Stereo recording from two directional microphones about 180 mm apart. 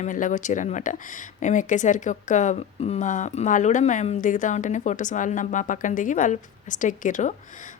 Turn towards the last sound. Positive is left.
turn(degrees=45)  # may be behind; listen again after turning